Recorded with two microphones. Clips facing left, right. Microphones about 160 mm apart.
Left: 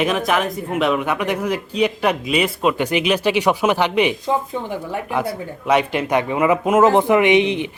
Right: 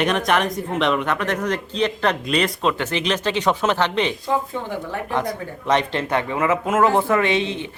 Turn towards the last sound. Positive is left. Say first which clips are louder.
# left 6 dB
turn(degrees=15)  # may be behind; listen again after turning